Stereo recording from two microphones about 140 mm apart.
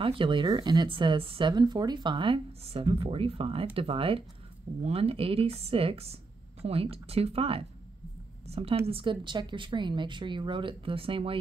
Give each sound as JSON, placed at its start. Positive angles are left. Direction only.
{"t": 0.0, "sound": "speech", "side_deg": -40}